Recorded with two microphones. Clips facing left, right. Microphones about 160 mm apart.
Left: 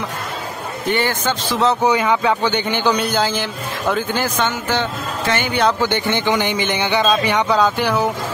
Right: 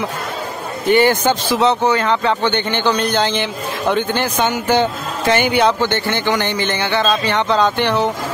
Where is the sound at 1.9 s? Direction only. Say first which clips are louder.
Even; 10° left (ahead or behind).